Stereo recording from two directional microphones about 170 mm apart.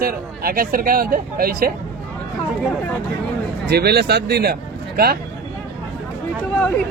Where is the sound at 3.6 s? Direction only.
70° right (ahead or behind).